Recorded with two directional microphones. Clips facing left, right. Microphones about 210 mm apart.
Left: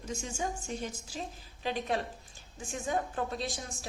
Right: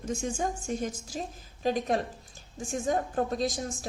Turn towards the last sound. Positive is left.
turn(degrees=-45)  # may be behind; listen again after turning